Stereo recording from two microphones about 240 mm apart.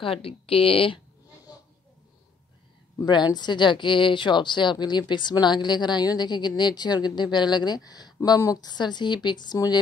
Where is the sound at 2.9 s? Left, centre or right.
Centre.